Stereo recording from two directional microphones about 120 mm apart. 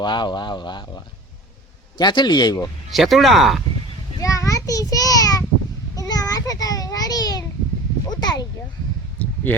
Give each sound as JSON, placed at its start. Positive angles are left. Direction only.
{"t": 0.0, "sound": "speech", "side_deg": 40}
{"t": 2.9, "sound": "speech", "side_deg": 0}
{"t": 4.2, "sound": "a sound", "side_deg": 30}
{"t": 6.0, "sound": "child singing", "side_deg": 30}
{"t": 8.1, "sound": "speech", "side_deg": 35}
{"t": 9.1, "sound": "a sound", "side_deg": 15}